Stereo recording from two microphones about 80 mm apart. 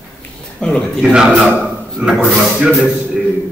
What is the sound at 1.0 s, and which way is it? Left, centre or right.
A man's voice, centre.